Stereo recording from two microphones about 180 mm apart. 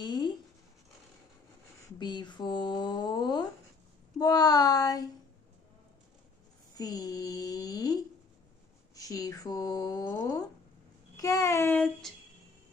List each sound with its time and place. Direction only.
0.0 s writing: 25° left (ahead or behind)
2.0 s speech: 25° left (ahead or behind)
6.7 s a sound: 20° left (ahead or behind)
8.9 s a child's voice: 20° left (ahead or behind)